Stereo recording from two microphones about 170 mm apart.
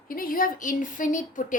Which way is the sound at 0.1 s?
55° left (ahead or behind).